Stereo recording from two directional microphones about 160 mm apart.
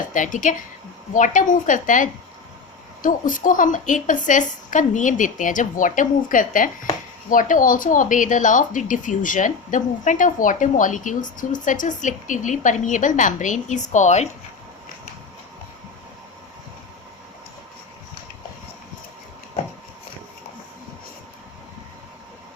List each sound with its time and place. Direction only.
0.1 s a woman's voice: 55° left (ahead or behind)